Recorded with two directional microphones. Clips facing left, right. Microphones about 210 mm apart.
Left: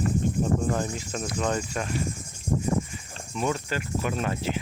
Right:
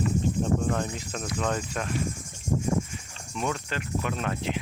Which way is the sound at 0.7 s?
Centre (ahead or behind).